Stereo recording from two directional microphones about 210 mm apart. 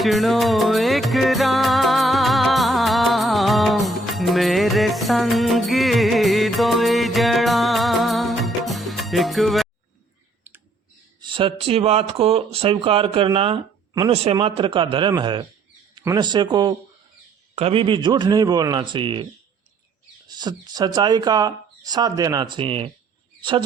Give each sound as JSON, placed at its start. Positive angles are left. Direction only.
{"t": 0.0, "sound": "music", "side_deg": 0}
{"t": 10.5, "sound": "clicking", "side_deg": -10}
{"t": 11.2, "sound": "speech", "side_deg": -25}